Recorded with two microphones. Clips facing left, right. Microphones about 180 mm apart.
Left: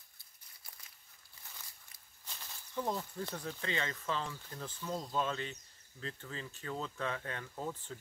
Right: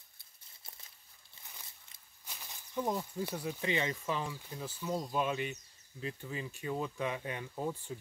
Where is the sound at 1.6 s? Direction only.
25° right (ahead or behind).